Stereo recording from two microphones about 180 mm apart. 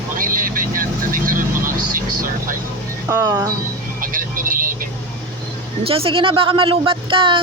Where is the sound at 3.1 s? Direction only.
20° right (ahead or behind).